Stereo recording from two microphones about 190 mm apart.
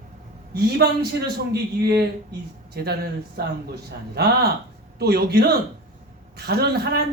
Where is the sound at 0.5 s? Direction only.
55° right (ahead or behind).